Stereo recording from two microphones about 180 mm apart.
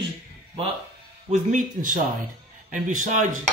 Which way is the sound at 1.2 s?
45° right (ahead or behind).